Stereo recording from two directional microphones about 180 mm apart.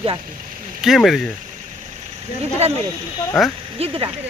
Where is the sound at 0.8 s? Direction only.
Centre (ahead or behind).